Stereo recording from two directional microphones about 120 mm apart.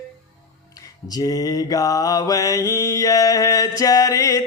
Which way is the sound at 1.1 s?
30° left (ahead or behind).